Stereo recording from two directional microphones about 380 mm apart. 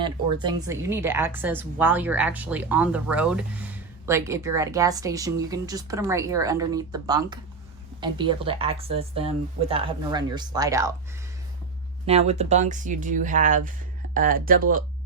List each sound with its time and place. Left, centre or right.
0.0 s a woman's voice: centre
12.0 s speech: centre